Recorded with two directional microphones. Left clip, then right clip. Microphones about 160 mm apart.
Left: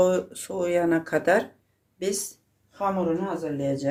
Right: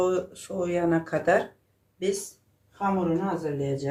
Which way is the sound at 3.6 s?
90° left.